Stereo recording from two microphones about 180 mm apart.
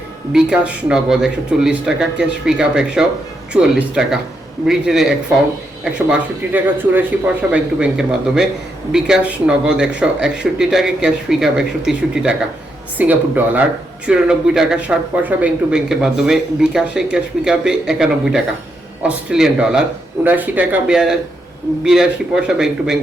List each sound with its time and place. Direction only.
0.3 s speech: 5° right (ahead or behind)